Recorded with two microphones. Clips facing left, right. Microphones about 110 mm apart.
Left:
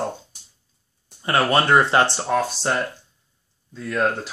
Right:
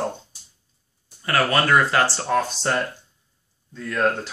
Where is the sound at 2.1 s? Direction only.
10° left (ahead or behind).